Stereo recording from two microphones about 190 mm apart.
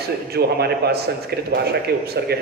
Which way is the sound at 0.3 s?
55° right (ahead or behind).